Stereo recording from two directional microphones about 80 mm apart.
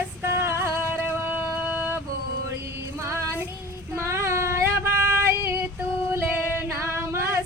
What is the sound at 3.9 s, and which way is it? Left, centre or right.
Female singing, right.